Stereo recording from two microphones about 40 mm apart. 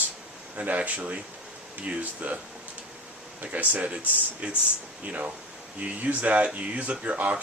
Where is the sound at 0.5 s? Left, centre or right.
Right.